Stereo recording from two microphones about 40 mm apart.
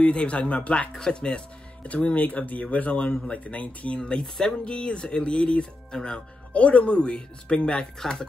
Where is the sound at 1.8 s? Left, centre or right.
Left.